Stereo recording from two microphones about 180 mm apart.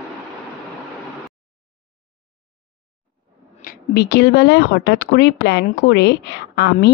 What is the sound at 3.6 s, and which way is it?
Speech, 60° left (ahead or behind).